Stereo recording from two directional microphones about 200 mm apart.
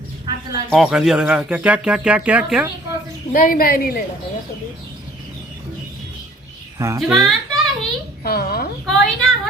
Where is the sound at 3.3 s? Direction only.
45° left (ahead or behind).